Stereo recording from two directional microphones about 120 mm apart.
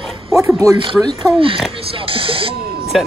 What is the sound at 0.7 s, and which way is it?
Speech, 45° right (ahead or behind).